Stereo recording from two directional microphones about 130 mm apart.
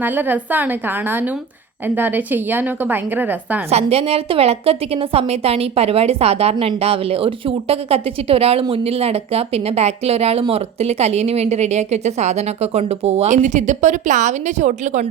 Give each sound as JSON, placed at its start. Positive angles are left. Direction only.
{"t": 0.0, "sound": "a woman's voice", "side_deg": -15}
{"t": 3.7, "sound": "a woman's voice", "side_deg": -50}
{"t": 13.3, "sound": "a woman's voice", "side_deg": -70}